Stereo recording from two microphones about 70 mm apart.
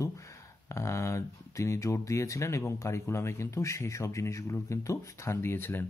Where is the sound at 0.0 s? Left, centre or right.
Left.